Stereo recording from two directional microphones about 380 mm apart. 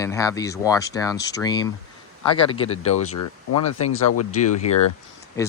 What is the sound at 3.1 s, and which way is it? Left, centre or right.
Speech, left.